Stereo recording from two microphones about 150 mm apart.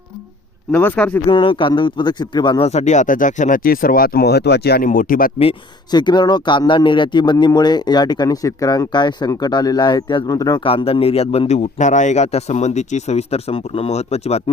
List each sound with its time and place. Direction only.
0.7 s speech: 10° left (ahead or behind)
1.3 s speech: 35° left (ahead or behind)
2.6 s speech: 50° left (ahead or behind); by 5.3 s 70° left (ahead or behind)
5.9 s a man's voice: 30° left (ahead or behind)